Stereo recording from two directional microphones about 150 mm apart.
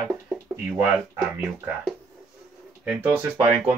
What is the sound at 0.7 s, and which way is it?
Speech, 15° right (ahead or behind).